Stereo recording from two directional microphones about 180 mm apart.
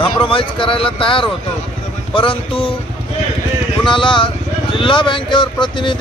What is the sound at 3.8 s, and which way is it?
Speech, 25° left (ahead or behind).